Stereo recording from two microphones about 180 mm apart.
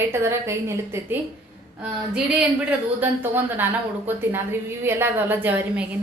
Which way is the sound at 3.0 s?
10° right (ahead or behind).